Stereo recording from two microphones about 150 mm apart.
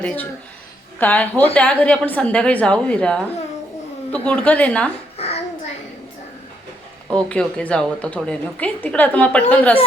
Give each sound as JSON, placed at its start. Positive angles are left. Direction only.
{"t": 0.0, "sound": "a woman's voice", "side_deg": 5}
{"t": 5.1, "sound": "a sound", "side_deg": 40}
{"t": 7.1, "sound": "a woman's voice", "side_deg": 5}